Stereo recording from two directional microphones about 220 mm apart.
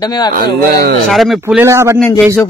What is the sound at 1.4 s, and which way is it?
Speech, 10° right (ahead or behind).